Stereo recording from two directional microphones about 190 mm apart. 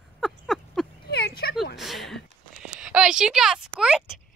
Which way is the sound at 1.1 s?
60° left (ahead or behind).